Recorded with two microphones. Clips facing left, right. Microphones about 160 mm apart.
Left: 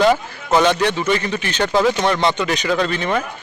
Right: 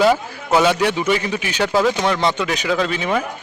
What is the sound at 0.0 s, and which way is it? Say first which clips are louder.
A man's voice: even; 5° right (ahead or behind).